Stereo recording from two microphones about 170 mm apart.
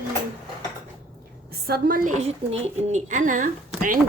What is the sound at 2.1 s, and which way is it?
A woman's voice, 40° right (ahead or behind).